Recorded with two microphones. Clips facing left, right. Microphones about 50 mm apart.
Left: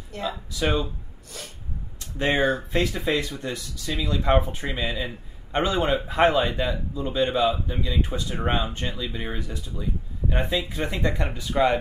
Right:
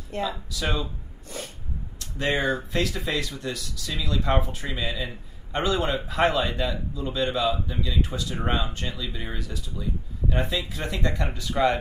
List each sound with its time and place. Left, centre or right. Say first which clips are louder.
0.1 s speech: right 2 dB; right
0.5 s a man's voice: left 4 dB; left
2.0 s a man's voice: left 3 dB; left
8.5 s a man's voice: left 2 dB; centre